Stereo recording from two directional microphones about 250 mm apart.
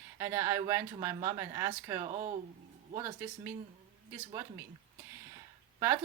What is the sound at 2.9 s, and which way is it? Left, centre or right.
Speech, centre.